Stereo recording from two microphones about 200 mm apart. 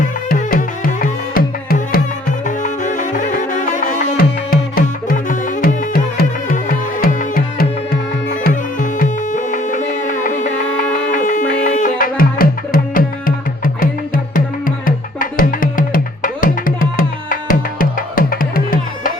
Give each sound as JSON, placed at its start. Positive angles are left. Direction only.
{"t": 0.0, "sound": "music", "side_deg": 45}
{"t": 14.8, "sound": "music", "side_deg": 45}